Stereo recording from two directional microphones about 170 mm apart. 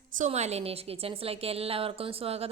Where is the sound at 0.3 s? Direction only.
40° right (ahead or behind).